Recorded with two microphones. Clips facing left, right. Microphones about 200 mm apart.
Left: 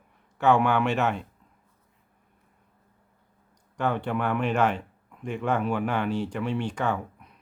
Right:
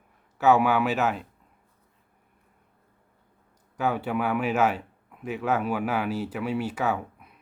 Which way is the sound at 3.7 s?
5° right (ahead or behind).